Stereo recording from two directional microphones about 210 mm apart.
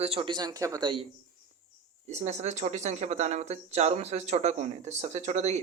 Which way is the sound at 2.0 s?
35° right (ahead or behind).